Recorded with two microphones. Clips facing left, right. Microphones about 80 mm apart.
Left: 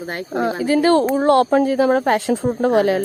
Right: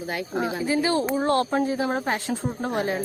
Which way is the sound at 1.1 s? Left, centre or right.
Left.